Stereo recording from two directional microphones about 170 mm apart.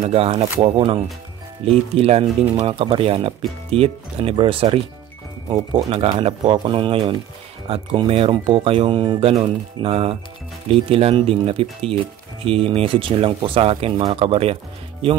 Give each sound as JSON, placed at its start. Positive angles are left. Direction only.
{"t": 0.0, "sound": "speech", "side_deg": -35}